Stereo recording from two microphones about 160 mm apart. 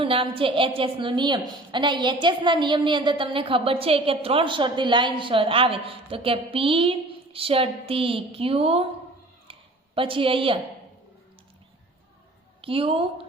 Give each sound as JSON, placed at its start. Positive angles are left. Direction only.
{"t": 0.0, "sound": "a woman's voice", "side_deg": -35}
{"t": 9.5, "sound": "a sound", "side_deg": -35}
{"t": 12.6, "sound": "a woman's voice", "side_deg": -35}